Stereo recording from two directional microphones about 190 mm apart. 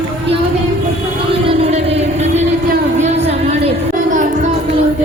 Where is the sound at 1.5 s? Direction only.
35° right (ahead or behind).